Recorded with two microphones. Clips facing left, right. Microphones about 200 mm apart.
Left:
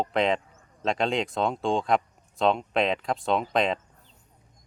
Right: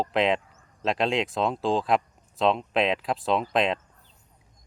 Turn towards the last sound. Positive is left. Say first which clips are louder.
# even
turn(degrees=0)  # may be behind; listen again after turning